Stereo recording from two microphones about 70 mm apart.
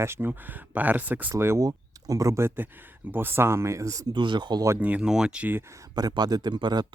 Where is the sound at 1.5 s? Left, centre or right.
Right.